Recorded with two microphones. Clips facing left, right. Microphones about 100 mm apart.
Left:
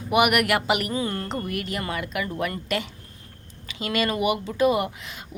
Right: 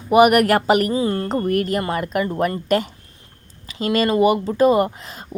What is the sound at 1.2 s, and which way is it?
Speech, 45° right (ahead or behind).